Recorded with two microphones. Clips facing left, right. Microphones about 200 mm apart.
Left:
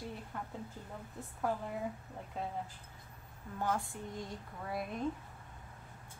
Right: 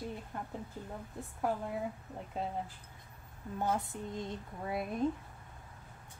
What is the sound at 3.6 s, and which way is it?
Speech, 20° right (ahead or behind).